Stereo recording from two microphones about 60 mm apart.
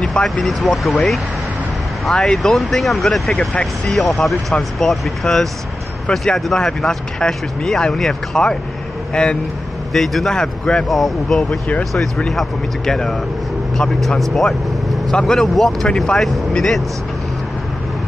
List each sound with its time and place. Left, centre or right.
0.0 s speech: centre
9.9 s speech: centre
10.9 s speech: centre